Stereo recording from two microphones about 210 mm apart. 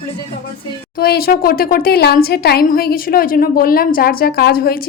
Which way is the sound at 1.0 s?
45° left (ahead or behind).